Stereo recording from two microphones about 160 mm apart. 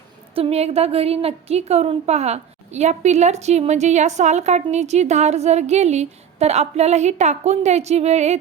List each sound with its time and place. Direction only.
0.3 s a woman's voice: 40° right (ahead or behind)